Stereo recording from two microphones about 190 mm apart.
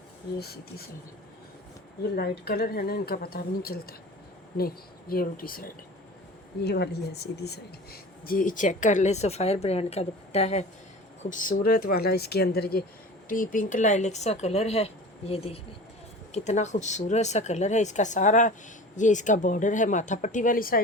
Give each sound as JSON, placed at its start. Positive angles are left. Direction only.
{"t": 0.3, "sound": "a woman's voice", "side_deg": 55}
{"t": 2.1, "sound": "a woman's voice", "side_deg": 55}
{"t": 6.6, "sound": "a woman's voice", "side_deg": 60}
{"t": 8.3, "sound": "a woman's voice", "side_deg": 45}